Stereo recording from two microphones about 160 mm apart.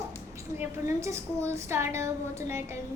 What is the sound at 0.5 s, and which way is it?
A woman's voice, 20° right (ahead or behind).